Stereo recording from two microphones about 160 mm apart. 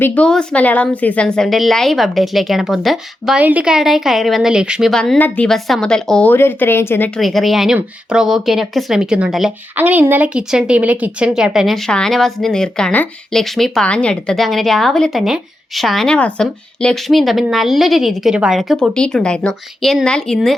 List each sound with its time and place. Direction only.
0.0 s speech: 10° left (ahead or behind)
7.2 s speech: centre (ahead or behind)